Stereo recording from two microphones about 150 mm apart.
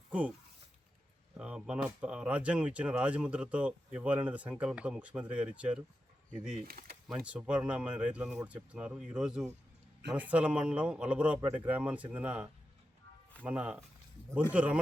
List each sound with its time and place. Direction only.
0.1 s speech: 10° right (ahead or behind)
1.4 s speech: 5° right (ahead or behind)
6.7 s speech: 85° right
7.1 s speech: 5° right (ahead or behind)